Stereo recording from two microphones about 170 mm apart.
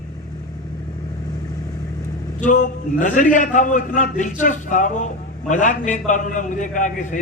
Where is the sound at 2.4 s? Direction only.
50° left (ahead or behind).